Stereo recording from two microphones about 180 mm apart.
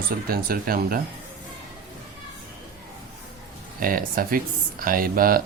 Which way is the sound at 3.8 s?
50° right (ahead or behind).